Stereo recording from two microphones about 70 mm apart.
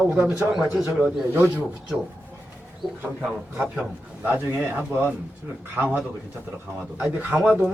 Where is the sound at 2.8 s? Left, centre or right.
Centre.